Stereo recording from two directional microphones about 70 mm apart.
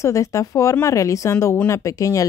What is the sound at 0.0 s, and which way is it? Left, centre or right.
A woman's voice, left.